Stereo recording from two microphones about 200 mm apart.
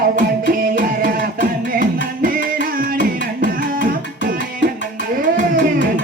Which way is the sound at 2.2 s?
45° right (ahead or behind).